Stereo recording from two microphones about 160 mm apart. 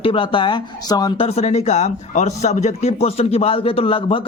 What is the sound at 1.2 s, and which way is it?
Speech, 40° left (ahead or behind).